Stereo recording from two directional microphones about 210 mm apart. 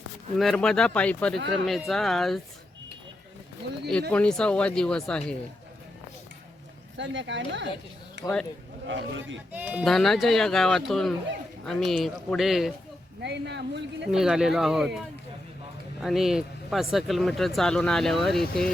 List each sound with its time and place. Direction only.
0.3 s speech: centre (ahead or behind)
4.1 s speech: 5° left (ahead or behind)
6.9 s speech: 60° right (ahead or behind)
9.5 s speech: 5° right (ahead or behind)
13.2 s speech: 55° right (ahead or behind)
14.1 s speech: 5° right (ahead or behind)